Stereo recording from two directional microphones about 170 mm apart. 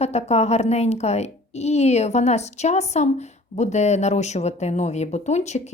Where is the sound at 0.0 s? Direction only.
40° left (ahead or behind).